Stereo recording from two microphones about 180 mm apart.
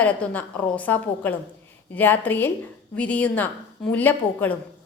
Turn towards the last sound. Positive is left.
turn(degrees=10)  # may be behind; listen again after turning